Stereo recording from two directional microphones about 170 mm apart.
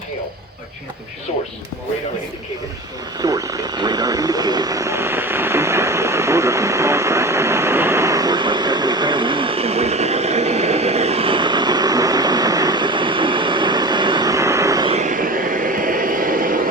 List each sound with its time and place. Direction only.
3.2 s vehicle: 20° right (ahead or behind)
14.8 s vehicle: 45° right (ahead or behind)